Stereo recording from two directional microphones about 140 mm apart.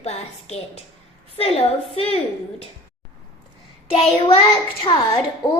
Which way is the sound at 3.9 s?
40° left (ahead or behind).